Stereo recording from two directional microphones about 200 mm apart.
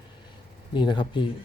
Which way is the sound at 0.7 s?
25° left (ahead or behind).